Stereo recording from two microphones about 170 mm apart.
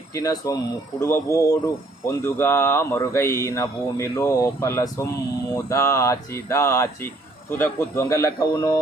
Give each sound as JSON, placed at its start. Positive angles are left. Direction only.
{"t": 0.1, "sound": "speech", "side_deg": 20}